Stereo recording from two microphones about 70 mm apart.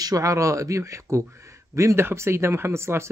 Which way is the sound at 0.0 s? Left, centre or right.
Right.